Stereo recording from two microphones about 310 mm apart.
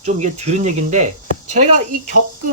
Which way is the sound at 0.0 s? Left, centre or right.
Right.